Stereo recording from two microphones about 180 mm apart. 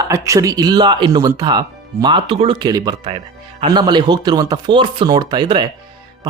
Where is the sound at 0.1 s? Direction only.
20° right (ahead or behind).